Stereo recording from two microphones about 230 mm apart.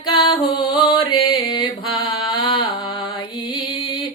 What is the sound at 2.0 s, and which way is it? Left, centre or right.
Music, centre.